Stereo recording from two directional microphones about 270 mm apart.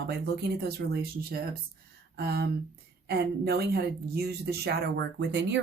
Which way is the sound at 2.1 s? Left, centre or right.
Right.